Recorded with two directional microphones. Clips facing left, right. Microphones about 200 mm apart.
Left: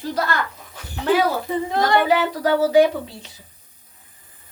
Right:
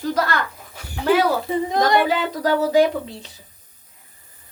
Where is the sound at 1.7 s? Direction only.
15° right (ahead or behind).